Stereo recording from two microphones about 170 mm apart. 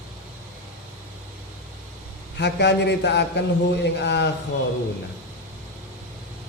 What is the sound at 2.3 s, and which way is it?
A man's voice, 85° left.